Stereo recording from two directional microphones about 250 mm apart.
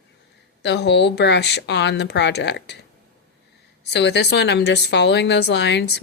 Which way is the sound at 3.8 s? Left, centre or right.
Left.